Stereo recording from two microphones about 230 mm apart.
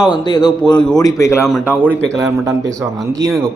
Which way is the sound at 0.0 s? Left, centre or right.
Centre.